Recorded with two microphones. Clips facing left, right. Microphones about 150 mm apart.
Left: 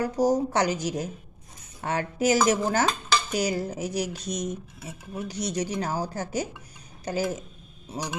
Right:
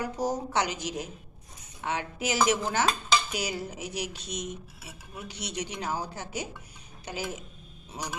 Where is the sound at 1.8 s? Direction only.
45° left (ahead or behind).